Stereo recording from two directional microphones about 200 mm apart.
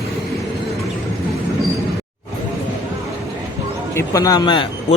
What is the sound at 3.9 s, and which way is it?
A man's voice, 15° left (ahead or behind).